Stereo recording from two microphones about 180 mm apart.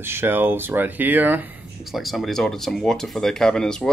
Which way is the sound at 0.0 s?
10° right (ahead or behind).